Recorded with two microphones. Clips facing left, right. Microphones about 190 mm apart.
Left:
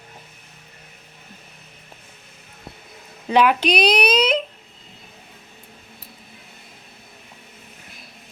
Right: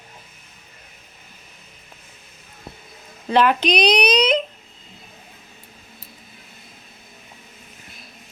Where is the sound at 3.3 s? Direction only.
10° left (ahead or behind).